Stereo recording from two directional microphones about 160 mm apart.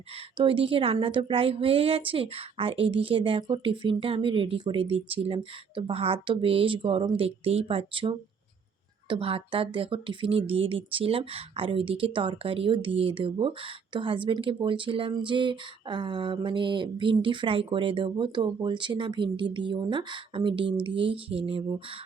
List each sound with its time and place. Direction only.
0.3 s a woman's voice: 35° right (ahead or behind)